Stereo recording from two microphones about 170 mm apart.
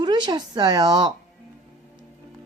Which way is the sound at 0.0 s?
25° right (ahead or behind).